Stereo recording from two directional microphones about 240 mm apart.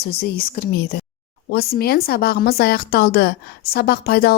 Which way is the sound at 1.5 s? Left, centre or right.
Left.